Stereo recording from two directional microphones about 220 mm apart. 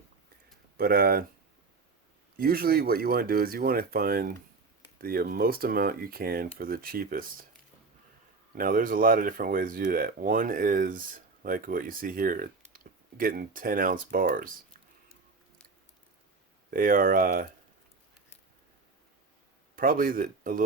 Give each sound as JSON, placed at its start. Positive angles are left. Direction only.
{"t": 0.8, "sound": "speech", "side_deg": -45}
{"t": 2.4, "sound": "speech", "side_deg": -40}
{"t": 8.5, "sound": "speech", "side_deg": -40}
{"t": 16.7, "sound": "speech", "side_deg": -40}
{"t": 19.7, "sound": "speech", "side_deg": -40}